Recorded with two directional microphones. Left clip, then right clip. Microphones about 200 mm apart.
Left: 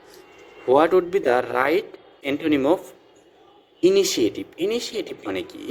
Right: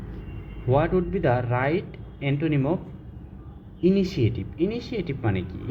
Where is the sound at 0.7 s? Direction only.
45° left (ahead or behind).